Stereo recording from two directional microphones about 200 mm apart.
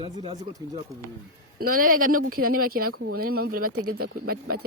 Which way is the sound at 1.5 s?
45° right (ahead or behind).